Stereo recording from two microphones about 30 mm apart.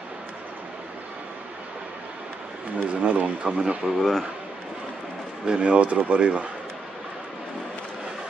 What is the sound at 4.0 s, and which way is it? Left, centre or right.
Speech, centre.